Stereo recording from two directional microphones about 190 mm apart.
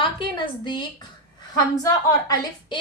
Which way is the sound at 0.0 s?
25° left (ahead or behind).